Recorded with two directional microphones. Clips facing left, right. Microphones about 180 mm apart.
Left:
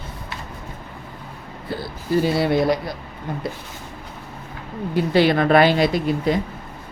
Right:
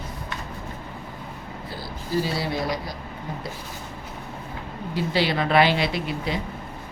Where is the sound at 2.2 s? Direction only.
60° left (ahead or behind).